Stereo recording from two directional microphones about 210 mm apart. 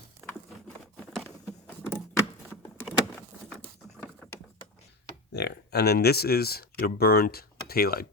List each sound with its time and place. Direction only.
1.1 s a sound: 10° left (ahead or behind)
2.8 s vehicle: centre (ahead or behind)
5.3 s speech: 50° left (ahead or behind)